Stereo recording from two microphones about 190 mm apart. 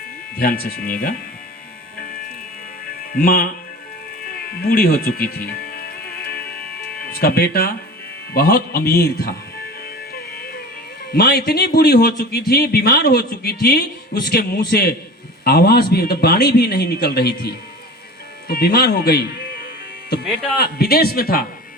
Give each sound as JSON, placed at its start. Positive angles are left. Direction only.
{"t": 0.3, "sound": "speech", "side_deg": 50}
{"t": 3.0, "sound": "speech", "side_deg": 50}
{"t": 4.3, "sound": "music", "side_deg": 50}
{"t": 8.3, "sound": "speech", "side_deg": 55}
{"t": 11.1, "sound": "a man's voice", "side_deg": 55}
{"t": 20.6, "sound": "speech", "side_deg": 55}